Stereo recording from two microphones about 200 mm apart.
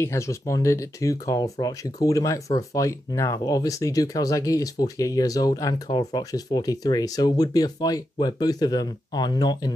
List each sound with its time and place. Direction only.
0.0 s speech: 15° left (ahead or behind)